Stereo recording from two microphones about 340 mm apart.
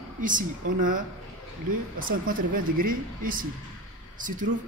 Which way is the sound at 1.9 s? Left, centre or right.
Right.